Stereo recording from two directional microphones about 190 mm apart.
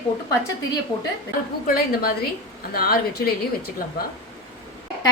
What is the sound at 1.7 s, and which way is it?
A woman's voice, 50° left (ahead or behind).